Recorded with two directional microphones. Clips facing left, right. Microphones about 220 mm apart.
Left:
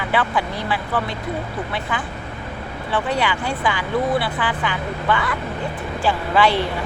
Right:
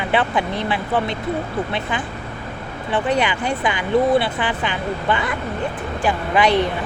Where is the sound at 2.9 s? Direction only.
20° right (ahead or behind).